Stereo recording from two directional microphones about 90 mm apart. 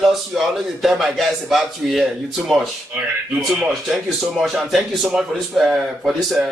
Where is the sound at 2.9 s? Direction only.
15° right (ahead or behind).